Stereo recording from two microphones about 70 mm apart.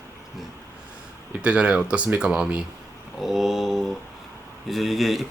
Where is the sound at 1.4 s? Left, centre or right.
Centre.